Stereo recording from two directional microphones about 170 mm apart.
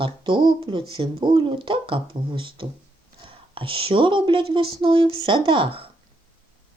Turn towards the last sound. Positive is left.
turn(degrees=-30)  # may be behind; listen again after turning